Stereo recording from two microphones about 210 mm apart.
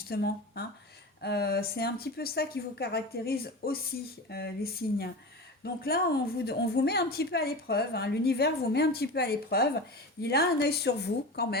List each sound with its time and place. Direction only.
0.1 s a woman's voice: 50° left (ahead or behind)